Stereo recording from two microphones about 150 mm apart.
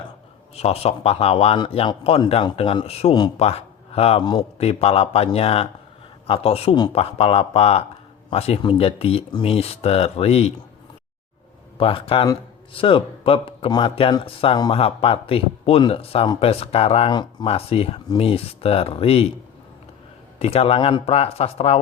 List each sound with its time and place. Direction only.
0.5 s speech: 45° left (ahead or behind)
4.2 s a man's voice: 30° left (ahead or behind)
4.5 s speech: 45° left (ahead or behind)
11.8 s speech: 35° left (ahead or behind)
20.4 s speech: 40° left (ahead or behind)